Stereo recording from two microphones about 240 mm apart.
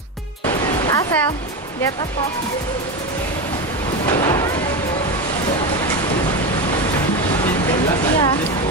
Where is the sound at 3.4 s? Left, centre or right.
Centre.